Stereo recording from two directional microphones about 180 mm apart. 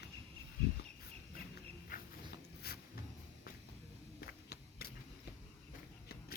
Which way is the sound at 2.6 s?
60° left (ahead or behind).